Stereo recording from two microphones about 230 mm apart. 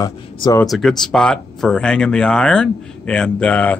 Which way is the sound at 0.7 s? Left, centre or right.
Centre.